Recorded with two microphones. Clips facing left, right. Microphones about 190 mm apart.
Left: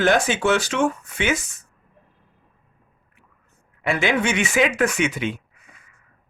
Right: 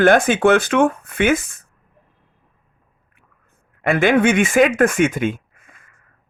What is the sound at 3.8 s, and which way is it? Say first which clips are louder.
Speech: right 7 dB; 55° right (ahead or behind).